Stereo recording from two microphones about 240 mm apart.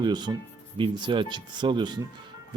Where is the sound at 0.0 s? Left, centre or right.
Centre.